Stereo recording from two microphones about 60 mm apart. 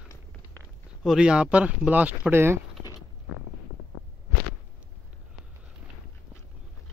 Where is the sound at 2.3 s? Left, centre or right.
Right.